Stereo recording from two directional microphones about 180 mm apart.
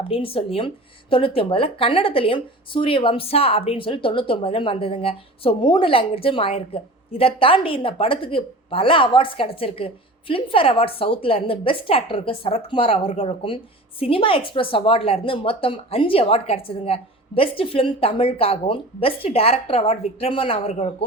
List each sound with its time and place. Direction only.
0.0 s speech: 30° left (ahead or behind)